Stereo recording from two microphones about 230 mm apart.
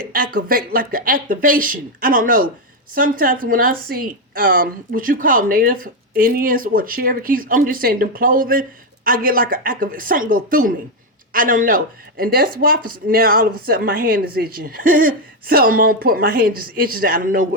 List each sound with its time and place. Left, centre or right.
0.1 s speech: right